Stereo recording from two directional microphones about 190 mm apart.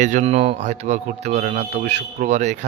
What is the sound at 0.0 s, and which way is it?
A man's voice, 40° right (ahead or behind).